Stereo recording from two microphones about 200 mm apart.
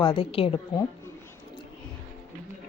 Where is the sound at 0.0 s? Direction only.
25° left (ahead or behind).